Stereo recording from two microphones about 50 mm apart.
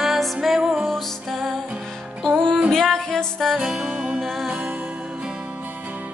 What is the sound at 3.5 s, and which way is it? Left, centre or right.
Music, centre.